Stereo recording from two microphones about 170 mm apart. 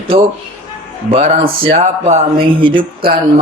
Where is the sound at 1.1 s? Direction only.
35° right (ahead or behind).